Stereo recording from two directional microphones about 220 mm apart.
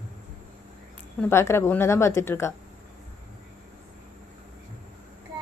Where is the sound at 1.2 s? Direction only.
10° left (ahead or behind).